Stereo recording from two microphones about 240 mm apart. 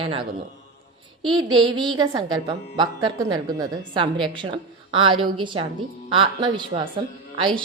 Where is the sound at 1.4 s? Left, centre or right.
Centre.